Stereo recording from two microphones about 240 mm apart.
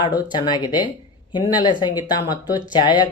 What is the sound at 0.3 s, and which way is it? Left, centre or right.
Speech, centre.